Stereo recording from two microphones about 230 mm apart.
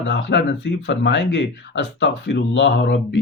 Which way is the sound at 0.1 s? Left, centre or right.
Left.